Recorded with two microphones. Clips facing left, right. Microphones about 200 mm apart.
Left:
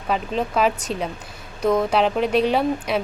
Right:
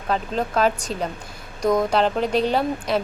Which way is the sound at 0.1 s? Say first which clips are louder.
Even; 5° left (ahead or behind).